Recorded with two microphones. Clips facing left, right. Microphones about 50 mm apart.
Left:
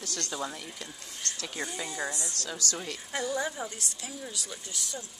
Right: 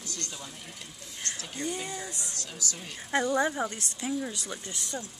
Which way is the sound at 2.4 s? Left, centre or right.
Left.